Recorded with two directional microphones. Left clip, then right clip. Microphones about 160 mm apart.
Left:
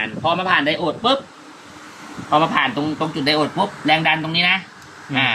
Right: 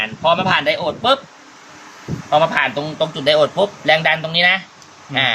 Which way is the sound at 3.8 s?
55° right (ahead or behind).